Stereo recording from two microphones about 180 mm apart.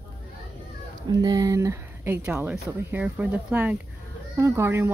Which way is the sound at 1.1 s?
20° right (ahead or behind).